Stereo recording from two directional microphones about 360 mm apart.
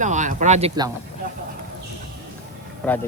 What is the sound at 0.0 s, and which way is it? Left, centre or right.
Speech, centre.